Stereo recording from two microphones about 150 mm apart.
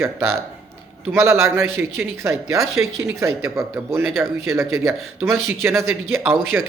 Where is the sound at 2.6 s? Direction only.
Centre (ahead or behind).